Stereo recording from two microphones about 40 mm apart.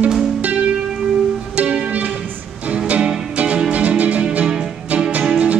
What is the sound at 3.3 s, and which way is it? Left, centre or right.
Music, right.